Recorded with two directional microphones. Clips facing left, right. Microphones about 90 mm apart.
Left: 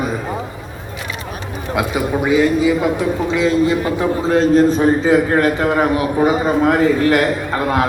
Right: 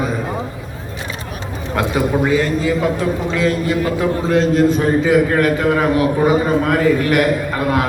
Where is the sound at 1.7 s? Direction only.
10° left (ahead or behind).